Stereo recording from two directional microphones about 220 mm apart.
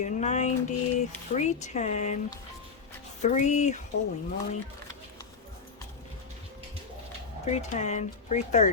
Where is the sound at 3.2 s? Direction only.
35° left (ahead or behind).